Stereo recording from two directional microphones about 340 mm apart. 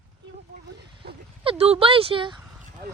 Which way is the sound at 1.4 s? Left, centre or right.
Centre.